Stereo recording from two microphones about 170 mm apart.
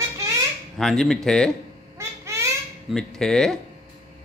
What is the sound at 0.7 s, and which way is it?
Speech, centre (ahead or behind).